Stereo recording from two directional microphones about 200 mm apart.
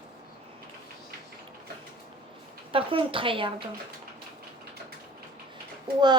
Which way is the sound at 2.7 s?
25° right (ahead or behind).